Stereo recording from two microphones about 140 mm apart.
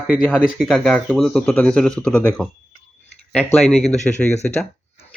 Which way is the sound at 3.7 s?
50° left (ahead or behind).